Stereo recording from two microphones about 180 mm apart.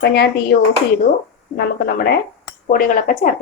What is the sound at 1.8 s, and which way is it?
Speech, 60° left (ahead or behind).